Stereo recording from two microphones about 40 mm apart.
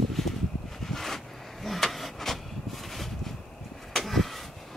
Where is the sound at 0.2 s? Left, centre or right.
Centre.